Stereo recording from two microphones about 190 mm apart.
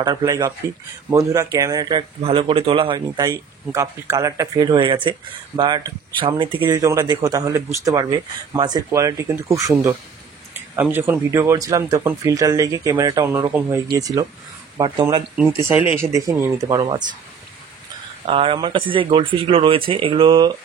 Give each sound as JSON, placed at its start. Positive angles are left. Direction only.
{"t": 0.0, "sound": "speech", "side_deg": -20}
{"t": 3.3, "sound": "speech", "side_deg": -15}
{"t": 18.2, "sound": "speech", "side_deg": -30}